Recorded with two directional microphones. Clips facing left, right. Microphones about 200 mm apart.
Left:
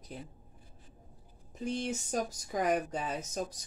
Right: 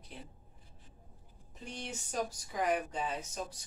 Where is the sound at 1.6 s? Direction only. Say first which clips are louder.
Left 9 dB; 45° left (ahead or behind).